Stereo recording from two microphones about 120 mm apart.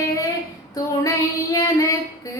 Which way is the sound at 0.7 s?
30° left (ahead or behind).